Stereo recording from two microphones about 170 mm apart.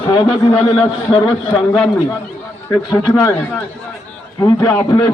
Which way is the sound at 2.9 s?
20° left (ahead or behind).